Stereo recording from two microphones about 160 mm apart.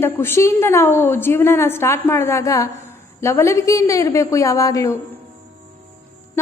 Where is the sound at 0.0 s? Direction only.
15° left (ahead or behind).